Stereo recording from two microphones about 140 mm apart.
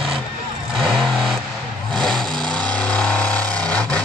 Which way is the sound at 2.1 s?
30° right (ahead or behind).